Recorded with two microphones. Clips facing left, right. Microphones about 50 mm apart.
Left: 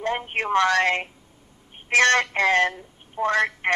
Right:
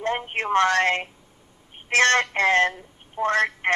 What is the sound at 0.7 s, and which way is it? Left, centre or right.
Speech, centre.